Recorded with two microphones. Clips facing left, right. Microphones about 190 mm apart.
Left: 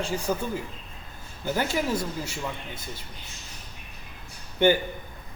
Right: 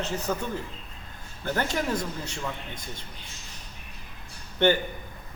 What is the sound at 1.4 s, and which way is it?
A woman's voice, 5° left (ahead or behind).